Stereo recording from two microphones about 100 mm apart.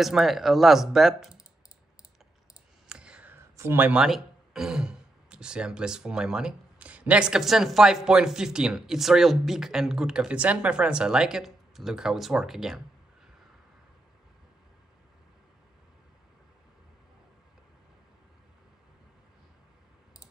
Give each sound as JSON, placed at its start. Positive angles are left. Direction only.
{"t": 0.0, "sound": "speech", "side_deg": 0}
{"t": 2.9, "sound": "clicking", "side_deg": -10}
{"t": 3.3, "sound": "a sound", "side_deg": -25}
{"t": 3.8, "sound": "speech", "side_deg": -5}